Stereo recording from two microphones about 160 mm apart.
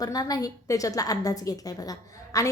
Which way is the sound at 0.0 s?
25° left (ahead or behind).